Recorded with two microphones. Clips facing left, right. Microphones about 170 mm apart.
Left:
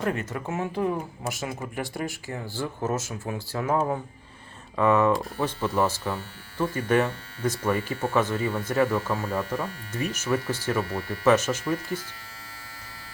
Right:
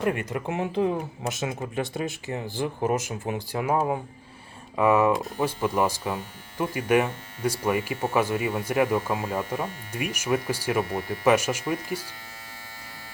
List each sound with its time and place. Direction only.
0.0 s speech: 15° right (ahead or behind)